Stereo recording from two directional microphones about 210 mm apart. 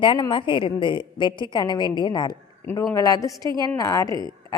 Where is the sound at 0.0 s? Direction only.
20° left (ahead or behind).